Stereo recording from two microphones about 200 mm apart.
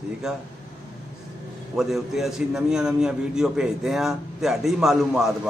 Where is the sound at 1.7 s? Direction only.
Centre (ahead or behind).